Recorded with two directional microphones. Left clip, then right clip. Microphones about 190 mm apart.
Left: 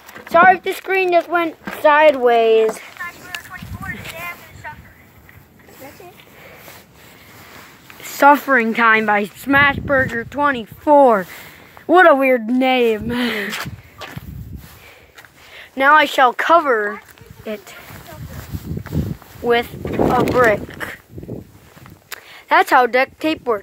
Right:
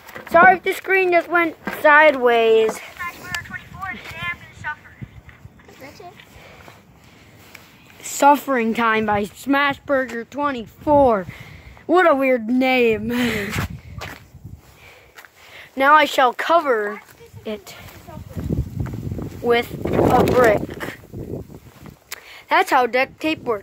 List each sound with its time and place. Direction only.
0.3 s speech: 10° left (ahead or behind)
2.5 s a sound: 15° right (ahead or behind)
8.0 s speech: 5° right (ahead or behind)
8.6 s speech: 10° right (ahead or behind)
10.1 s speech: 10° left (ahead or behind); by 13.5 s 10° right (ahead or behind)
13.5 s a sound: 35° left (ahead or behind)
15.5 s speech: 5° right (ahead or behind)
19.4 s speech: centre (ahead or behind)
22.1 s speech: 5° left (ahead or behind)